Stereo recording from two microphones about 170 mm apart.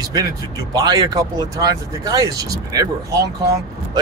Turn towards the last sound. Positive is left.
turn(degrees=-20)  # may be behind; listen again after turning